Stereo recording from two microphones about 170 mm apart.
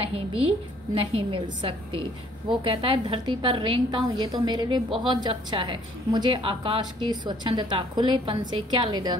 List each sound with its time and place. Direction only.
0.0 s a woman's voice: 35° right (ahead or behind)